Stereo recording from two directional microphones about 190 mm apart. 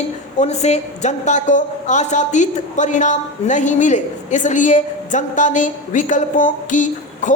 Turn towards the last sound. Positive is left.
turn(degrees=40)  # may be behind; listen again after turning